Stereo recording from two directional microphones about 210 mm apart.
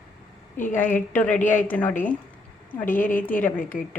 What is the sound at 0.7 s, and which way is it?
A woman's voice, 10° left (ahead or behind).